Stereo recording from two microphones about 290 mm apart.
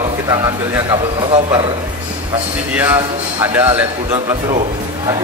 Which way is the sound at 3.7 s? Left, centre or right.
Centre.